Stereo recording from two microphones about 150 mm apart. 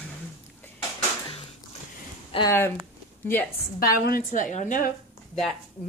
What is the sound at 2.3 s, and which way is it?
Speech, 40° left (ahead or behind).